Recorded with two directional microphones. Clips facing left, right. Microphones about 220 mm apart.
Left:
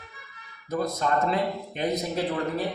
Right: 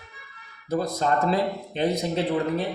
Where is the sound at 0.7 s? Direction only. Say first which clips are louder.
Right 2 dB; 35° right (ahead or behind).